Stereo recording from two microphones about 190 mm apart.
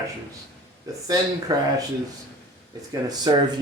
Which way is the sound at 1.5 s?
20° right (ahead or behind).